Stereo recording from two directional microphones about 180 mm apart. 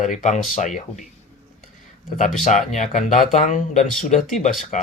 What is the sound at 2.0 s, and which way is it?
A man's voice, 45° left (ahead or behind).